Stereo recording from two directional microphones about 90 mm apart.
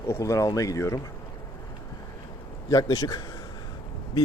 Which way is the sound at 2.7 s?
40° left (ahead or behind).